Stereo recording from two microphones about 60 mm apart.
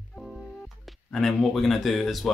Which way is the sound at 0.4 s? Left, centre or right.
Centre.